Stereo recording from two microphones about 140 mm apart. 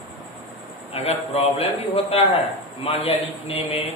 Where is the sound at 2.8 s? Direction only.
45° left (ahead or behind).